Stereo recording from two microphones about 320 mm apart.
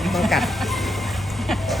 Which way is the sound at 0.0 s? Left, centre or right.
Centre.